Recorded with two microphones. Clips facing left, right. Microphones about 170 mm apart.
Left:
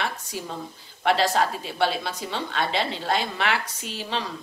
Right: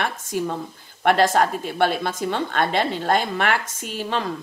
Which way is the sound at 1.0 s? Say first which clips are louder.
Right 4 dB; 50° right (ahead or behind).